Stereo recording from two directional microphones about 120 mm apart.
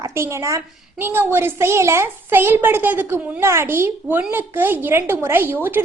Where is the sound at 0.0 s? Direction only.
25° right (ahead or behind).